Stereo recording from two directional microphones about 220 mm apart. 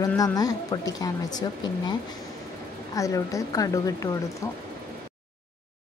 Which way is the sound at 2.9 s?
15° left (ahead or behind).